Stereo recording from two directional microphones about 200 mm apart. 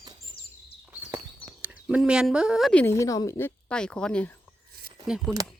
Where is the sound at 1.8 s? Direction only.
5° right (ahead or behind).